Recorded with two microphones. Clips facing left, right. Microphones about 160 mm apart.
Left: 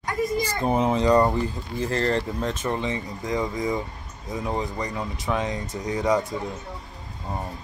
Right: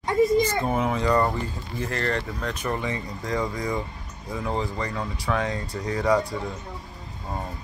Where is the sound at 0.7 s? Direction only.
20° left (ahead or behind).